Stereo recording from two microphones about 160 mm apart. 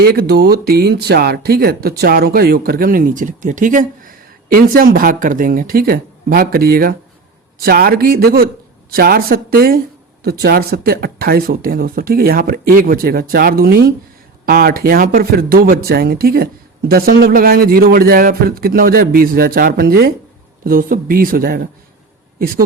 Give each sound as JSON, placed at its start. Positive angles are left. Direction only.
{"t": 0.0, "sound": "speech", "side_deg": -75}